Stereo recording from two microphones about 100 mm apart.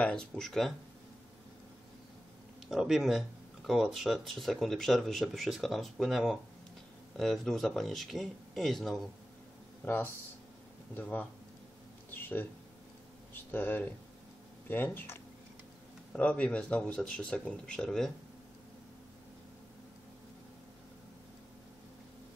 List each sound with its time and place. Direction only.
0.0 s speech: 10° left (ahead or behind)
2.7 s speech: 5° right (ahead or behind)
9.8 s speech: 20° left (ahead or behind)
12.1 s a sound: 20° left (ahead or behind)
13.3 s speech: 20° left (ahead or behind)